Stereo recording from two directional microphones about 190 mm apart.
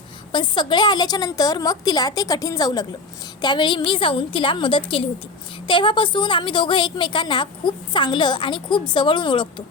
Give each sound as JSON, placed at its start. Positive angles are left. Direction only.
{"t": 0.3, "sound": "a woman's voice", "side_deg": 25}